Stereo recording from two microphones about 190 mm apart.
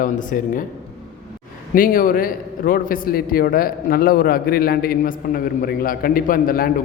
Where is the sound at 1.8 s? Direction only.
50° left (ahead or behind).